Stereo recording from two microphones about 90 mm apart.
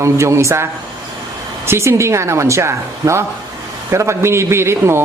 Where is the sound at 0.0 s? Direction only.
30° right (ahead or behind).